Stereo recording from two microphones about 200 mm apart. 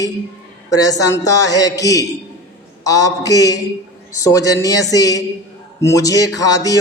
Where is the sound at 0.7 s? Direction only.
15° left (ahead or behind).